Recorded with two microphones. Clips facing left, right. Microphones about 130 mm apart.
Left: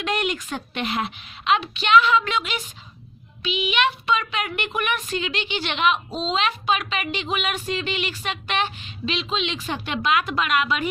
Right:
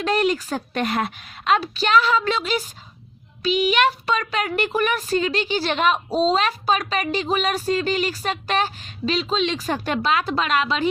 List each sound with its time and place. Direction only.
0.0 s speech: 35° right (ahead or behind)